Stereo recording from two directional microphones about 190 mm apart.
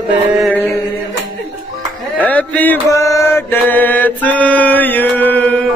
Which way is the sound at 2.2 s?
5° left (ahead or behind).